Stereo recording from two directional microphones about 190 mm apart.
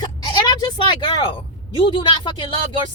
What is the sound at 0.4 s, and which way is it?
Speech, 20° left (ahead or behind).